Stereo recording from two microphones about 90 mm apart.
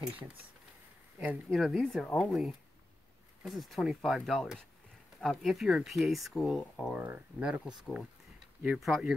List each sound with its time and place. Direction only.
1.5 s speech: centre (ahead or behind)
6.8 s speech: 15° right (ahead or behind)
7.8 s speech: centre (ahead or behind)